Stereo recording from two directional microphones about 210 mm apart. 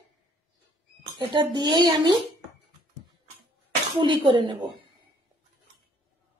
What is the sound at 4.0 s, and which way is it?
Speech, 25° right (ahead or behind).